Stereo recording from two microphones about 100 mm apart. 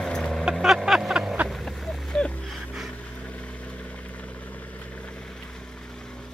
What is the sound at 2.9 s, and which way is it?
Vehicle, 15° left (ahead or behind).